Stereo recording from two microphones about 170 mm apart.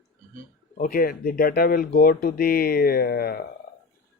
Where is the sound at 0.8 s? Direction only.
60° left (ahead or behind).